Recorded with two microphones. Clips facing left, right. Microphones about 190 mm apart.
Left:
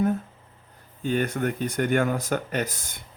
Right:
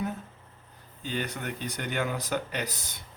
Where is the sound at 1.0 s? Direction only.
50° left (ahead or behind).